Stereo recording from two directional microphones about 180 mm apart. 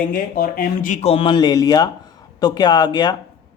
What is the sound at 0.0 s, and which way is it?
Speech, 55° left (ahead or behind).